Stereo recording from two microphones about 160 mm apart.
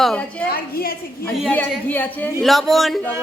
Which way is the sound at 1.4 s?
10° left (ahead or behind).